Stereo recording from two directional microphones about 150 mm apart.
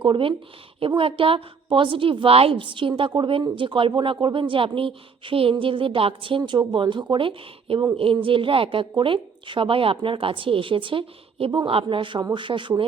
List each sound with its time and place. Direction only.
0.0 s a woman's voice: 35° right (ahead or behind)